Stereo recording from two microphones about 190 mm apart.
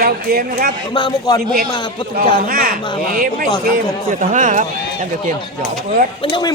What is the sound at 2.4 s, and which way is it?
A man's voice, 50° right (ahead or behind).